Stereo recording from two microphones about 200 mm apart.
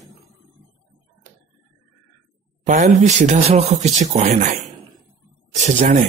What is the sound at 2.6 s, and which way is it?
Speech, 35° right (ahead or behind).